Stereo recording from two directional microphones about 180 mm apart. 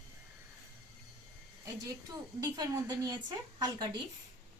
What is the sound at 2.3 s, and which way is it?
A woman's voice, 20° right (ahead or behind).